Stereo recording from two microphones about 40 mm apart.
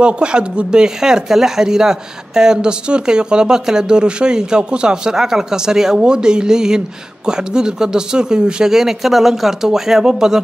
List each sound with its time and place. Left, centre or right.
0.0 s speech: right
8.7 s speech: centre